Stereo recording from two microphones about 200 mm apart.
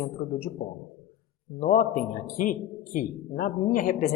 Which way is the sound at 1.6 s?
40° left (ahead or behind).